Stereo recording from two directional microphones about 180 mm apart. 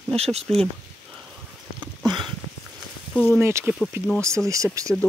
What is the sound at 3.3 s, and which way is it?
Speech, 15° right (ahead or behind).